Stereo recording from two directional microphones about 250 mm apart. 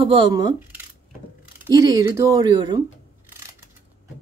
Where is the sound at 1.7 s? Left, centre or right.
Centre.